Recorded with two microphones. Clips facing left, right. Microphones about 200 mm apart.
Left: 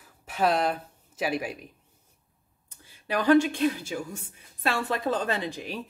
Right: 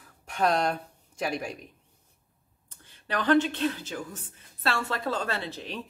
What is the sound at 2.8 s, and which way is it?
A woman's voice, 10° left (ahead or behind).